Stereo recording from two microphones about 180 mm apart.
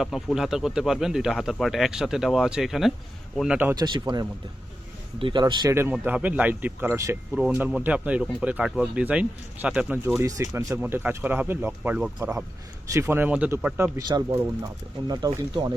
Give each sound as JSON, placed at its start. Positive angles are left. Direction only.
{"t": 0.0, "sound": "speech", "side_deg": 0}
{"t": 3.8, "sound": "speech", "side_deg": -25}
{"t": 5.7, "sound": "speech", "side_deg": -10}
{"t": 14.1, "sound": "speech", "side_deg": -25}